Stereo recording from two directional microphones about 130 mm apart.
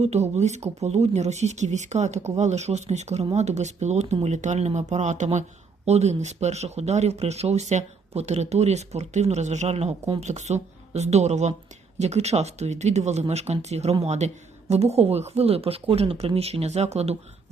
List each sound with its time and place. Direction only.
0.0 s speech: 60° right (ahead or behind)